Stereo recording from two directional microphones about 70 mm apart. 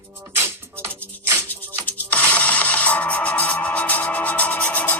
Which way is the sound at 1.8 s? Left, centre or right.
Left.